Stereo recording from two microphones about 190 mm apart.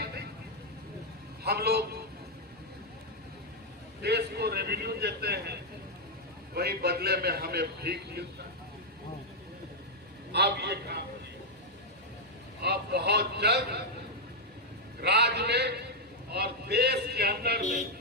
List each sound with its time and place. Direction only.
1.5 s a man's voice: 60° right (ahead or behind)
4.0 s a man's voice: 60° right (ahead or behind)
10.3 s a man's voice: 60° right (ahead or behind)
12.6 s a man's voice: 60° right (ahead or behind)
15.0 s a man's voice: 60° right (ahead or behind)